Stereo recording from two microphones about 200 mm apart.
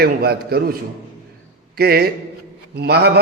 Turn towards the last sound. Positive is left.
turn(degrees=-55)  # may be behind; listen again after turning